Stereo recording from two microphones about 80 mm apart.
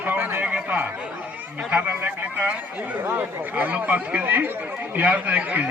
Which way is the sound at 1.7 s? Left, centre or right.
Right.